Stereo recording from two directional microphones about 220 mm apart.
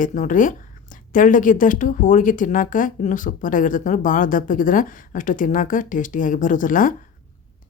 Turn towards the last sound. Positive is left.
turn(degrees=35)  # may be behind; listen again after turning